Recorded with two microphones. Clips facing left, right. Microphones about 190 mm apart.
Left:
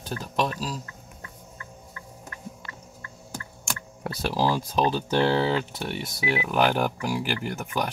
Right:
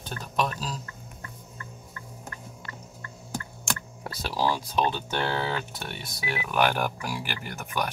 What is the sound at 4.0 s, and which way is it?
Speech, 50° left (ahead or behind).